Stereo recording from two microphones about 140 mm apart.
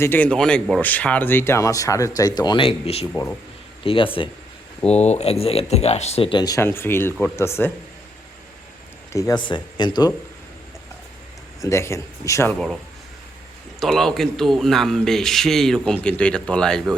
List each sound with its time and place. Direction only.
0.0 s speech: 15° left (ahead or behind); by 4.3 s 40° left (ahead or behind)
4.9 s speech: 50° left (ahead or behind)
6.3 s speech: 30° left (ahead or behind)
6.6 s speech: 15° left (ahead or behind)
9.1 s speech: 20° left (ahead or behind)
9.4 s speech: 35° left (ahead or behind)
11.6 s speech: 20° left (ahead or behind)
13.7 s speech: centre (ahead or behind)